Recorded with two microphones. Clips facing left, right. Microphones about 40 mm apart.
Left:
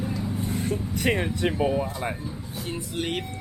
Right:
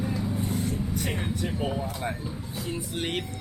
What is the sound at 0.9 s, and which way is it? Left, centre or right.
Speech, left.